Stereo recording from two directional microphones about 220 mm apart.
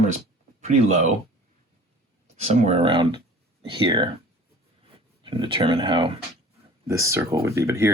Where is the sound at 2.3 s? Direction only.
30° right (ahead or behind).